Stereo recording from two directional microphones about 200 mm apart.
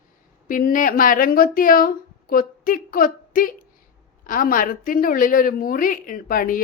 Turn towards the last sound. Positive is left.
turn(degrees=45)  # may be behind; listen again after turning